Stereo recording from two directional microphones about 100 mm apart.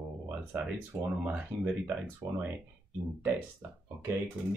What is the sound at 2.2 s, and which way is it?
Speech, 40° right (ahead or behind).